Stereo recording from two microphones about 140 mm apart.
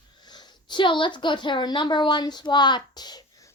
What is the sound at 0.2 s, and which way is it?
Speech, 30° left (ahead or behind).